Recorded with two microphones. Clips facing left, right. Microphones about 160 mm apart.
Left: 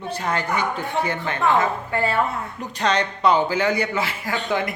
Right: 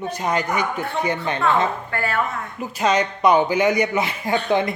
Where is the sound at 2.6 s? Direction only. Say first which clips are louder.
Right 3 dB; 10° right (ahead or behind).